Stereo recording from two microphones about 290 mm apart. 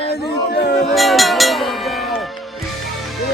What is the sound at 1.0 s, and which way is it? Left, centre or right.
Speech, centre.